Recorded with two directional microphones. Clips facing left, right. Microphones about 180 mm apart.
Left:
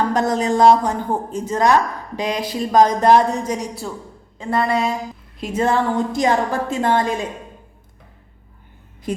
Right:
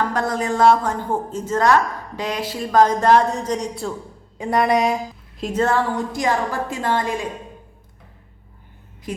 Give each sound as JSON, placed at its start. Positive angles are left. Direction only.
{"t": 0.1, "sound": "speech", "side_deg": 20}
{"t": 4.4, "sound": "a woman's voice", "side_deg": -15}
{"t": 5.5, "sound": "a woman's voice", "side_deg": 15}